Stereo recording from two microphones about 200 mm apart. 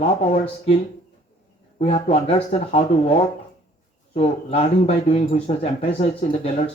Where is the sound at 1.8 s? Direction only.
30° left (ahead or behind).